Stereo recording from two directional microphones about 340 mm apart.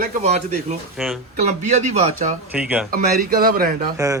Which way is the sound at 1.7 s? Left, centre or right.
Centre.